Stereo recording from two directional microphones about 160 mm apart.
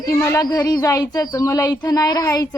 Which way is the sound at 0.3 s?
20° left (ahead or behind).